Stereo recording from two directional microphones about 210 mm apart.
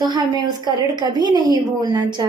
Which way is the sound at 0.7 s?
20° right (ahead or behind).